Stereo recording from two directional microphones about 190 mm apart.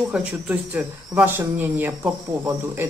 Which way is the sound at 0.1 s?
5° right (ahead or behind).